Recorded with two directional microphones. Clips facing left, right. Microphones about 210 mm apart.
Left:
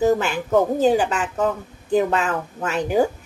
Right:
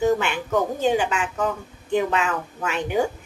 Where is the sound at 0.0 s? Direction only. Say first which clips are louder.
Left 2 dB; 40° left (ahead or behind).